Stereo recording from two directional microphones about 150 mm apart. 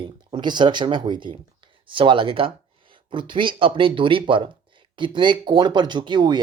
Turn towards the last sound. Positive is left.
turn(degrees=-30)  # may be behind; listen again after turning